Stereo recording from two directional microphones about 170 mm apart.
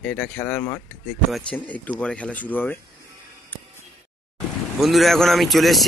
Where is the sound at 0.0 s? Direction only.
5° left (ahead or behind).